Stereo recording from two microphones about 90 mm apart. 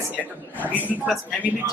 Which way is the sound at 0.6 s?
20° left (ahead or behind).